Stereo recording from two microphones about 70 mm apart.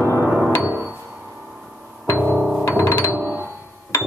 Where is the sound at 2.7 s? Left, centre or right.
Left.